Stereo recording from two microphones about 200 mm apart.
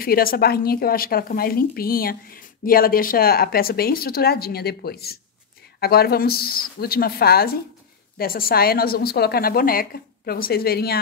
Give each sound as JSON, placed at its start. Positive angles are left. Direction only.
{"t": 0.0, "sound": "a woman's voice", "side_deg": 50}